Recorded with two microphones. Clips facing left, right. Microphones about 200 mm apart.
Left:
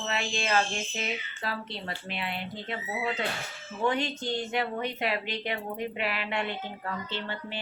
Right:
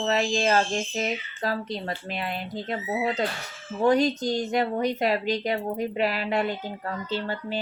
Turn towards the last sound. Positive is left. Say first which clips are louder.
# right 7 dB
turn(degrees=-40)  # may be behind; listen again after turning